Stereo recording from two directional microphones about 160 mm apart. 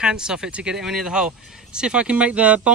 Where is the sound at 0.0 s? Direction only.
5° right (ahead or behind).